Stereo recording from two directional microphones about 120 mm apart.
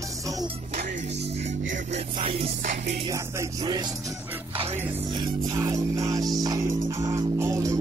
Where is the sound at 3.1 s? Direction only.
30° right (ahead or behind).